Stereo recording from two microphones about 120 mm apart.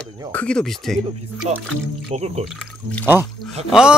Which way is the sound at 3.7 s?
5° right (ahead or behind).